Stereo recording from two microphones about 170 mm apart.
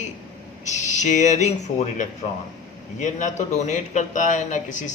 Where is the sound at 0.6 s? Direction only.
45° left (ahead or behind).